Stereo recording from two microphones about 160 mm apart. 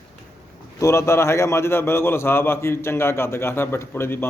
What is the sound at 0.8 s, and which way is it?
A man's voice, 15° left (ahead or behind).